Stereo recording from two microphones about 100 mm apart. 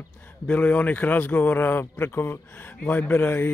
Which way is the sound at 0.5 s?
15° left (ahead or behind).